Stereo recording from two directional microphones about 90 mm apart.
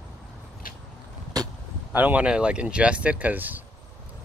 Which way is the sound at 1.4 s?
45° right (ahead or behind).